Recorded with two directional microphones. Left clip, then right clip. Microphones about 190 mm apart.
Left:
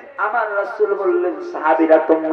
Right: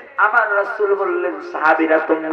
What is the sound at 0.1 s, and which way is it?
Music, 25° right (ahead or behind).